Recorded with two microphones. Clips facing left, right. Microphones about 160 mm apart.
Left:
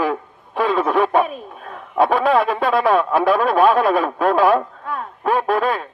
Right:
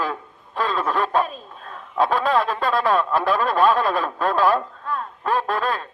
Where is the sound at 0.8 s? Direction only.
60° left (ahead or behind).